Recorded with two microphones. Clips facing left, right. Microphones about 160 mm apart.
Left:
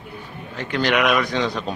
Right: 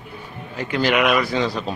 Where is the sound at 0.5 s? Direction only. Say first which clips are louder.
Right 1 dB; 5° right (ahead or behind).